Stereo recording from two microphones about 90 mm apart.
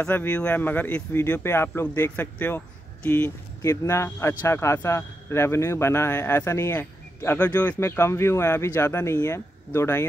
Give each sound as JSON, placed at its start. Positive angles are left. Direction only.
{"t": 0.0, "sound": "a man's voice", "side_deg": 15}
{"t": 3.6, "sound": "a man's voice", "side_deg": 30}